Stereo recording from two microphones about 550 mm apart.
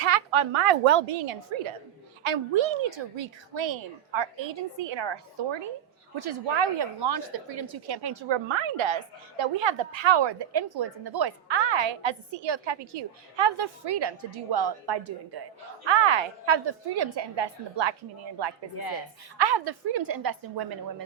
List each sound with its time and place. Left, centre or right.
0.0 s a woman's voice: right
15.9 s a woman's voice: right
19.4 s a woman's voice: right